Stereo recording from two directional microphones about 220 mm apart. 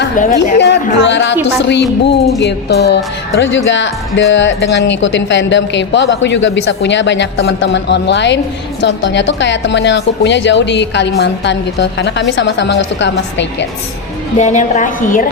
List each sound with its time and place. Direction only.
0.2 s a woman's voice: 35° left (ahead or behind)
0.6 s a woman's voice: 55° left (ahead or behind)
14.3 s a woman's voice: 35° left (ahead or behind)